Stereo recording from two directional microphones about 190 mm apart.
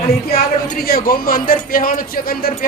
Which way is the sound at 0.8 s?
50° left (ahead or behind).